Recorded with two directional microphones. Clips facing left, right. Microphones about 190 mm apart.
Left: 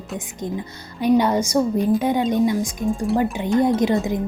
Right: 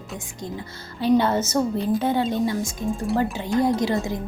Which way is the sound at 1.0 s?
15° left (ahead or behind).